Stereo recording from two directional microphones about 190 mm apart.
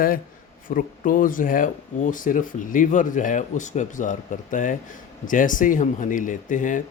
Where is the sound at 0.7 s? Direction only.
45° left (ahead or behind).